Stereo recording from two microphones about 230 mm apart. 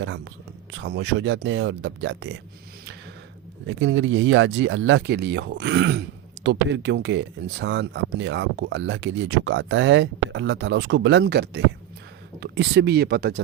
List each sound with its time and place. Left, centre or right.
0.7 s speech: right
3.7 s speech: right